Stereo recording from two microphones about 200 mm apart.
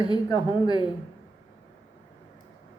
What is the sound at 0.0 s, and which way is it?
Speech, 20° left (ahead or behind).